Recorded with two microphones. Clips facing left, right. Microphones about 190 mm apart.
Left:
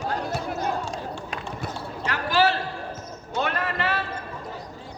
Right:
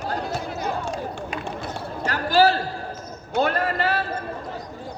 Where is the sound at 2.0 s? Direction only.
35° right (ahead or behind).